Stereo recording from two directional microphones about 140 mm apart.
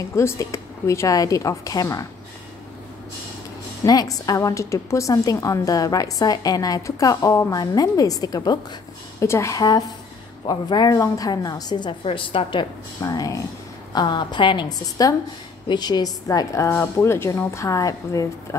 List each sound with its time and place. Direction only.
0.1 s a woman's voice: 20° left (ahead or behind)
3.8 s a woman's voice: 25° left (ahead or behind)